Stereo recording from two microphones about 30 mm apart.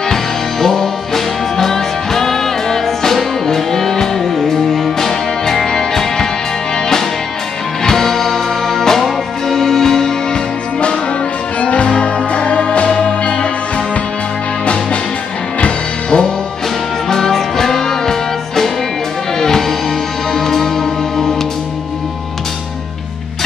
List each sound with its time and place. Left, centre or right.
0.1 s music: centre
4.2 s music: centre
5.7 s music: centre
7.8 s music: centre
11.6 s music: left
14.6 s music: left
17.1 s music: centre
19.3 s music: centre